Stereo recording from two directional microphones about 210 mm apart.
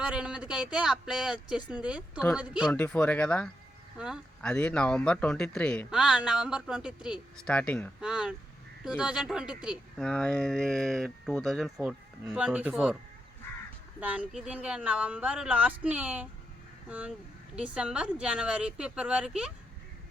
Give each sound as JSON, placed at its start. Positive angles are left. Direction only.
{"t": 0.0, "sound": "speech", "side_deg": -5}
{"t": 2.7, "sound": "speech", "side_deg": 5}
{"t": 14.0, "sound": "speech", "side_deg": -5}